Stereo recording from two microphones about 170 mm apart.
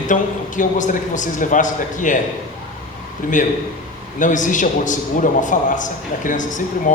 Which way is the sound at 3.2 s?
50° left (ahead or behind).